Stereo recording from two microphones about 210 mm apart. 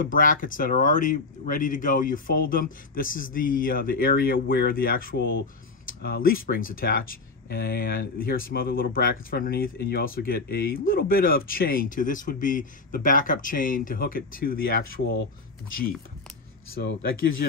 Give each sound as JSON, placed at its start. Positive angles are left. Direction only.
{"t": 0.0, "sound": "speech", "side_deg": 40}
{"t": 16.8, "sound": "speech", "side_deg": 60}